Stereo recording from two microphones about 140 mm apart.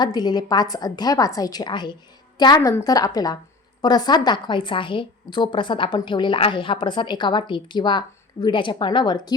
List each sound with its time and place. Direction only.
0.0 s a woman's voice: 30° left (ahead or behind)
2.6 s a woman's voice: 20° left (ahead or behind)